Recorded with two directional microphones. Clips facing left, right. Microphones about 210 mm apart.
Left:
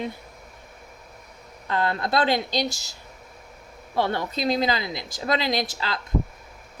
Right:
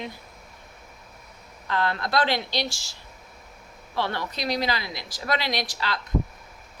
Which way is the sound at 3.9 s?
25° left (ahead or behind).